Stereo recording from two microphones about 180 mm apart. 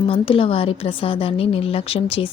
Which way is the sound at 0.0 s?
30° left (ahead or behind).